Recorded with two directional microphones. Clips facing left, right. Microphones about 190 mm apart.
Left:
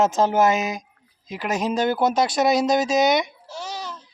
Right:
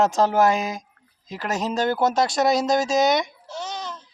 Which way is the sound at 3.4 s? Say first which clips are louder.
Right 1 dB; 10° left (ahead or behind).